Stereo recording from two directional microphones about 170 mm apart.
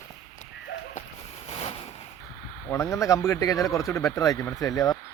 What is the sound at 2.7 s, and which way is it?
Speech, 15° left (ahead or behind).